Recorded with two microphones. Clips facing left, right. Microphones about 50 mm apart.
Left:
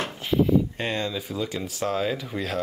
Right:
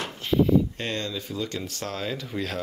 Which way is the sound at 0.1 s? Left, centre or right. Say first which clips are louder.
Right 1 dB; centre.